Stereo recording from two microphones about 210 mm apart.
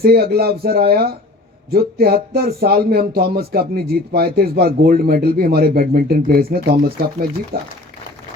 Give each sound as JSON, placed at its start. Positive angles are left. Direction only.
{"t": 0.0, "sound": "speech", "side_deg": -45}